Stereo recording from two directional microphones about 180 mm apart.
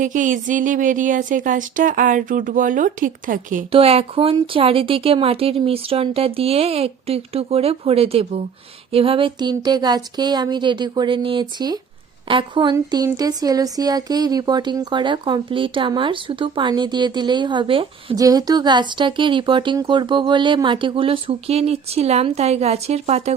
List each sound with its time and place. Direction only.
0.0 s speech: 45° right (ahead or behind)
3.7 s speech: 30° right (ahead or behind)